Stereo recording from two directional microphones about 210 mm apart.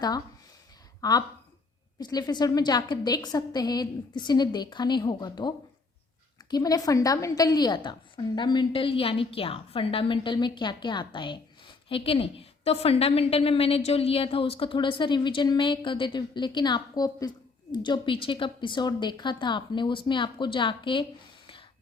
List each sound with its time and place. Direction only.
1.0 s a woman's voice: 20° left (ahead or behind)